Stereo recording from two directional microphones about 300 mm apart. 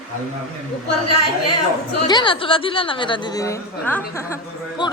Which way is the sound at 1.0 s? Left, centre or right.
Left.